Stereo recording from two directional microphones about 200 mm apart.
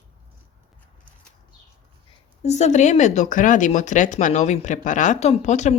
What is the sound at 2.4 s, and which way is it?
Speech, 35° left (ahead or behind).